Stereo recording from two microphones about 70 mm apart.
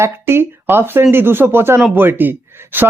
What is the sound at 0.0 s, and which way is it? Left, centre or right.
Speech, right.